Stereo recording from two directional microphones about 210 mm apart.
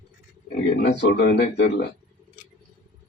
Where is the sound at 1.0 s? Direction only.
55° left (ahead or behind).